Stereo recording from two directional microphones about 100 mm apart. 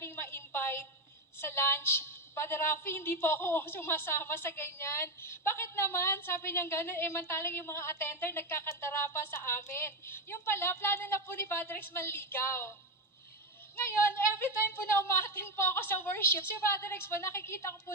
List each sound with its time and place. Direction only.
0.0 s a sound: 25° left (ahead or behind)
1.4 s a woman's voice: 25° left (ahead or behind)
13.8 s a woman's voice: 20° left (ahead or behind)